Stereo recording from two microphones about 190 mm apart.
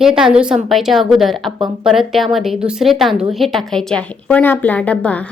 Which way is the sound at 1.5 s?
20° right (ahead or behind).